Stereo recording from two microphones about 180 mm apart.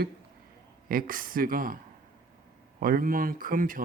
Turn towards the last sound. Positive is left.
turn(degrees=-50)  # may be behind; listen again after turning